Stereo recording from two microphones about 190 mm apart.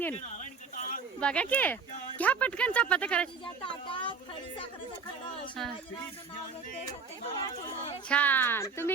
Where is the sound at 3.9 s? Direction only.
25° left (ahead or behind).